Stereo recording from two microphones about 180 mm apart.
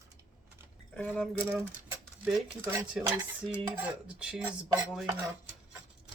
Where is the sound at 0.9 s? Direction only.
10° left (ahead or behind).